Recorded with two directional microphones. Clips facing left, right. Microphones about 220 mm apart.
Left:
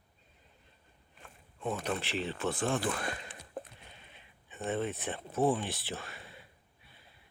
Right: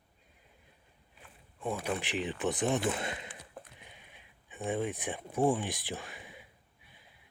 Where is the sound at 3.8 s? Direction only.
15° right (ahead or behind).